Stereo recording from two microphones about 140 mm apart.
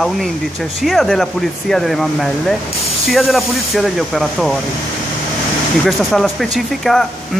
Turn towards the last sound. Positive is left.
turn(degrees=0)  # may be behind; listen again after turning